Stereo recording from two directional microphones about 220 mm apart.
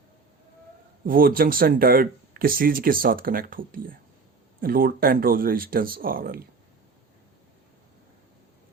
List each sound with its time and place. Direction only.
1.0 s speech: 40° right (ahead or behind)